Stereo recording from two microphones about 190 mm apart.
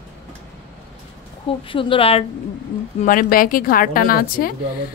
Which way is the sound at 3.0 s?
45° left (ahead or behind).